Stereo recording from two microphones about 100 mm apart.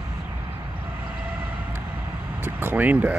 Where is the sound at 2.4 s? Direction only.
20° right (ahead or behind).